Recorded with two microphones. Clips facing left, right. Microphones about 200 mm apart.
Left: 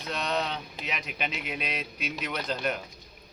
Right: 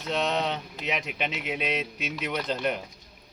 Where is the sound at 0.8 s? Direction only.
20° right (ahead or behind).